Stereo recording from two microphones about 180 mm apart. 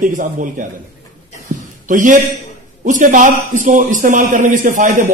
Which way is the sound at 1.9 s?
45° right (ahead or behind).